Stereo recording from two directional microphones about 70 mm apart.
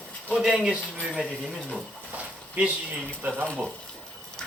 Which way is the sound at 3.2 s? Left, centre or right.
Right.